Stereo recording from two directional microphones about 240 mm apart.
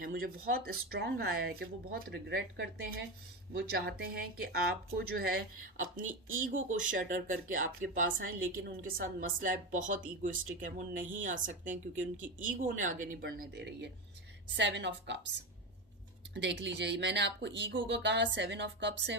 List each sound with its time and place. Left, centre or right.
0.0 s speech: right
16.3 s speech: right